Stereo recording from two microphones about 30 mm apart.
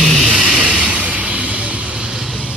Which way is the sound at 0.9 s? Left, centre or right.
Right.